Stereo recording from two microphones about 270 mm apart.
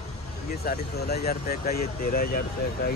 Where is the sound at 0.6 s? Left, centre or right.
Left.